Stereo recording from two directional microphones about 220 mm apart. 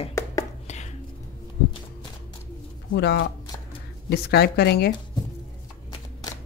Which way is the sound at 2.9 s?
50° left (ahead or behind).